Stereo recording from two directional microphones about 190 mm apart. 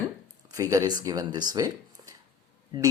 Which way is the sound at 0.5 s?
15° right (ahead or behind).